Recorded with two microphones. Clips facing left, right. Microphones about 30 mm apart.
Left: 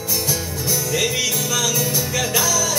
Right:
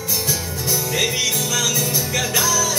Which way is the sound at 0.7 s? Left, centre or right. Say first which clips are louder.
Even; centre.